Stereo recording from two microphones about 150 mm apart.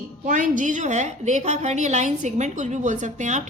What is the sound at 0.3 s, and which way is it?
A woman's voice, 60° right (ahead or behind).